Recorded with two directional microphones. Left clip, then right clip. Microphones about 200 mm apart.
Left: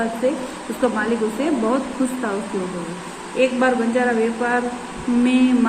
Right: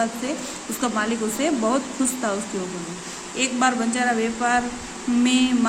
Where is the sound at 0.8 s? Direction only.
40° right (ahead or behind).